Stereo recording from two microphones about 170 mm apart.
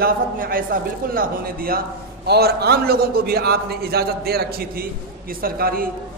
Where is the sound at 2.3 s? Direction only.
70° right (ahead or behind).